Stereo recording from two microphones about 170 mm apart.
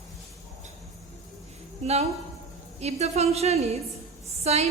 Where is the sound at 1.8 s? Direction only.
40° right (ahead or behind).